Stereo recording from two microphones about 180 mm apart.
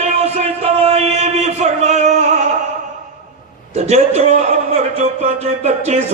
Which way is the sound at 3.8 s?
40° right (ahead or behind).